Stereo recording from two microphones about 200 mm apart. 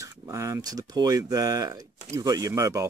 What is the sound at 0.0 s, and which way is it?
Speech, 15° right (ahead or behind).